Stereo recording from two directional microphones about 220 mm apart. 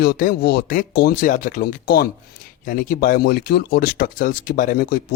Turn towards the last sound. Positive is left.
turn(degrees=40)  # may be behind; listen again after turning